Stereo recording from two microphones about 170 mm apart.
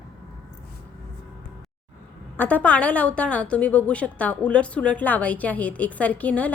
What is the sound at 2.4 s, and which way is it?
A woman's voice, 10° left (ahead or behind).